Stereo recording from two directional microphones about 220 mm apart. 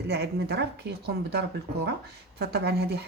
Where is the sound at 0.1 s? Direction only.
50° right (ahead or behind).